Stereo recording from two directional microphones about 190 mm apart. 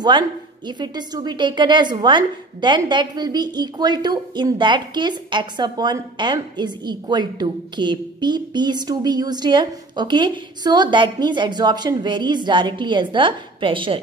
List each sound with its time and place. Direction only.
0.7 s a woman's voice: 25° right (ahead or behind)